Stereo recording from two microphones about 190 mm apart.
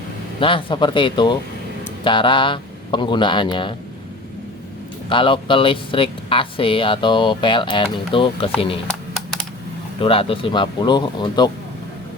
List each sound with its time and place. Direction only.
0.3 s speech: 25° left (ahead or behind)
5.0 s speech: 25° left (ahead or behind)
9.1 s typing: centre (ahead or behind)
10.0 s speech: 30° left (ahead or behind)